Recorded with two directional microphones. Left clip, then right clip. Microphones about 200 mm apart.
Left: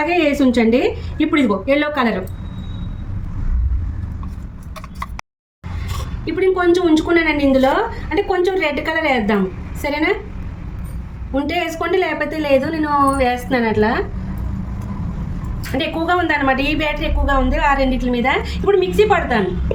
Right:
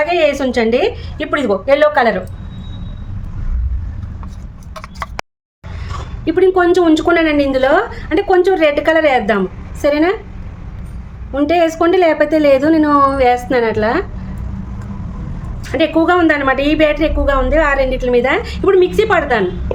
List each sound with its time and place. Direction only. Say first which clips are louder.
0.0 s a woman's voice: right 3 dB; 55° right (ahead or behind)
6.2 s a woman's voice: right 4 dB; 55° right (ahead or behind)
11.3 s a woman's voice: right 7 dB; 55° right (ahead or behind)
15.8 s a woman's voice: right 6 dB; 60° right (ahead or behind)